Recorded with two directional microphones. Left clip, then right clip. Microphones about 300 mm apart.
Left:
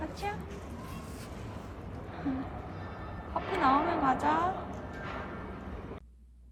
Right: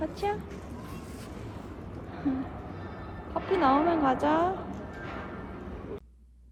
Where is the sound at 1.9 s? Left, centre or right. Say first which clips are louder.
Right 4 dB; centre.